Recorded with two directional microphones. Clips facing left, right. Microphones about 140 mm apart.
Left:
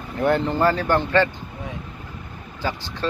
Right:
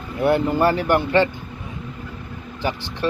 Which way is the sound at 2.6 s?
15° right (ahead or behind).